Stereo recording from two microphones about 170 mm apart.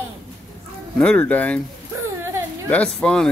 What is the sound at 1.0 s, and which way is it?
Speech, 5° left (ahead or behind).